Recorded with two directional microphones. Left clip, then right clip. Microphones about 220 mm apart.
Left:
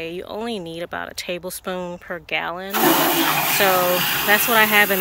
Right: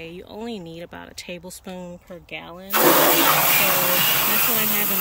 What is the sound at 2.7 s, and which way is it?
Speech, 25° right (ahead or behind).